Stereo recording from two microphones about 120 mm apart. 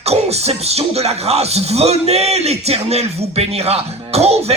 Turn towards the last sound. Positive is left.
turn(degrees=-60)  # may be behind; listen again after turning